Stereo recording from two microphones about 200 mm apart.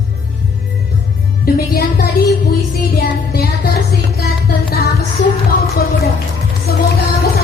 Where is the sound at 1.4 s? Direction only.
50° left (ahead or behind).